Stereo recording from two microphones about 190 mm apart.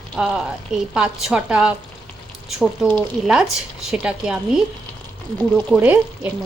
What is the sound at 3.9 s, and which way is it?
Speech, 5° right (ahead or behind).